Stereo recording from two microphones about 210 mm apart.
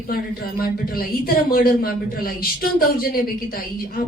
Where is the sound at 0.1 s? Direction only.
45° left (ahead or behind).